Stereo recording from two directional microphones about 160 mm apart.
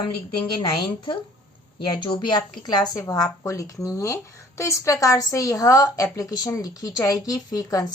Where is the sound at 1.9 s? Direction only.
30° left (ahead or behind).